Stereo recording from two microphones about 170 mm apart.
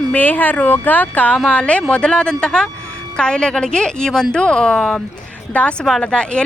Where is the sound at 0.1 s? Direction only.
10° left (ahead or behind).